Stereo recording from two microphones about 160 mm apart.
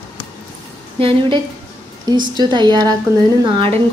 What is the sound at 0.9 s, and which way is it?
A woman's voice, 35° right (ahead or behind).